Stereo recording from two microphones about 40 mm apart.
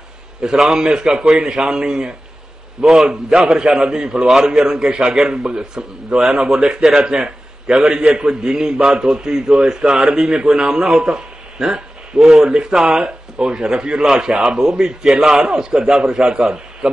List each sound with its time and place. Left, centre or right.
0.6 s a man's voice: centre
2.8 s a man's voice: centre
12.4 s speech: centre
12.7 s speech: centre
13.0 s a man's voice: centre